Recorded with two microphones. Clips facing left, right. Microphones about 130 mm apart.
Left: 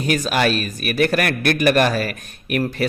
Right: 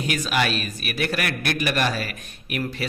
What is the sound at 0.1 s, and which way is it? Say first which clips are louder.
A man's voice: left 6 dB; 40° left (ahead or behind).